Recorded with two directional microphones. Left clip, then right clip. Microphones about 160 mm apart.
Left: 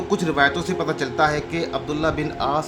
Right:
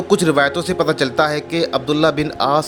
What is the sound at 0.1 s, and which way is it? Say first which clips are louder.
A man's voice: right 5 dB; 45° right (ahead or behind).